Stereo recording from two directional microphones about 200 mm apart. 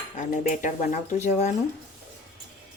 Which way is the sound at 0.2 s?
40° left (ahead or behind).